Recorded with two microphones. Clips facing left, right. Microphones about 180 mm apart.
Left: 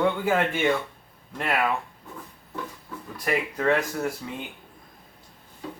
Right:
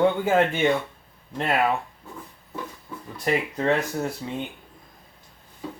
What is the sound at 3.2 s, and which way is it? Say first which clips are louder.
Speech: right 1 dB; 25° right (ahead or behind).